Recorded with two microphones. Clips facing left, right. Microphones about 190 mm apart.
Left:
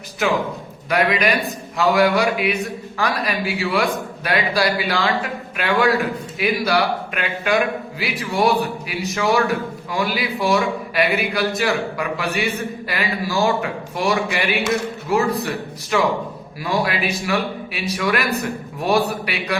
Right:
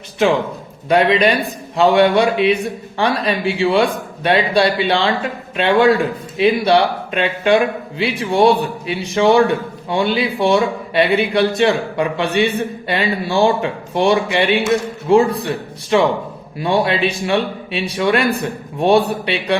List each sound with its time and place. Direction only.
0.9 s a man's voice: 30° right (ahead or behind)